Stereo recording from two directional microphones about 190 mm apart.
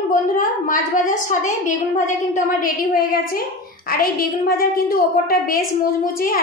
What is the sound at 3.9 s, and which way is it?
A woman's voice, 50° left (ahead or behind).